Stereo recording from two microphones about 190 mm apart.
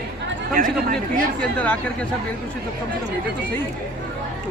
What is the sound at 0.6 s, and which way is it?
Speech, 45° right (ahead or behind).